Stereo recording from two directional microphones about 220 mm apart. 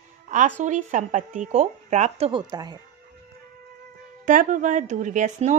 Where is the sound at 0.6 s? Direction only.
35° right (ahead or behind); by 2.8 s 20° right (ahead or behind).